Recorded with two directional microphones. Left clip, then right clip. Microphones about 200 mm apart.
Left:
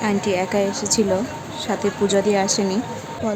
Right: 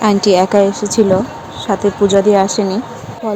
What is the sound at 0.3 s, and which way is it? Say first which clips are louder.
Speech: right 10 dB; 20° right (ahead or behind).